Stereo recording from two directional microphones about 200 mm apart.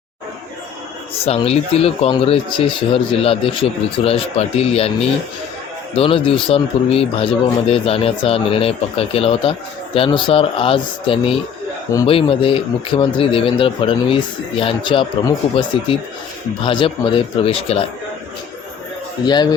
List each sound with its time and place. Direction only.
1.2 s speech: 30° left (ahead or behind)
19.2 s speech: 20° left (ahead or behind)